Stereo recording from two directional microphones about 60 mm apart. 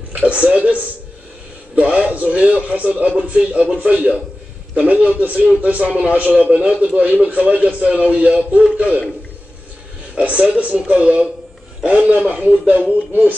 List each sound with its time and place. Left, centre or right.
0.1 s a man's voice: right
10.1 s a man's voice: right